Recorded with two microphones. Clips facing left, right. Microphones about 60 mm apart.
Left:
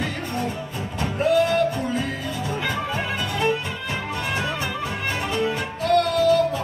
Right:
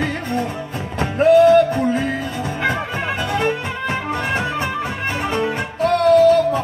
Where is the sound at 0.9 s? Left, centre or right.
Right.